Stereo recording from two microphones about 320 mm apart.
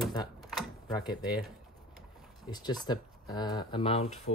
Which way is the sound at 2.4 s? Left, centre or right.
Centre.